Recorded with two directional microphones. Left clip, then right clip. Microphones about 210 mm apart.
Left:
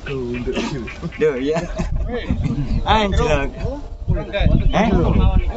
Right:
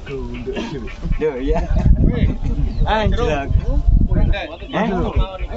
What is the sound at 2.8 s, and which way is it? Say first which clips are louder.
Speech: left 2 dB; 55° left (ahead or behind).